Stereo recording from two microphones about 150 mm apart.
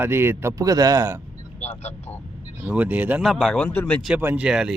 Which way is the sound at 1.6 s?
45° left (ahead or behind).